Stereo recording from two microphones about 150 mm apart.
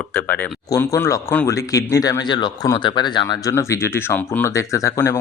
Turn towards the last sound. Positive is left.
turn(degrees=20)  # may be behind; listen again after turning